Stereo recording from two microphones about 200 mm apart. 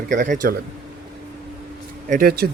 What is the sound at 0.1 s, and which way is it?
Speech, 40° right (ahead or behind).